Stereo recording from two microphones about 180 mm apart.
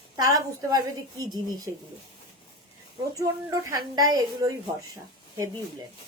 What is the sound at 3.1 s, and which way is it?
A woman's voice, 20° right (ahead or behind).